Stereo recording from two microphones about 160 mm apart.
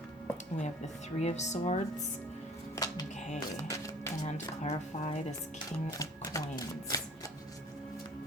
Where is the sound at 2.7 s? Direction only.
20° left (ahead or behind).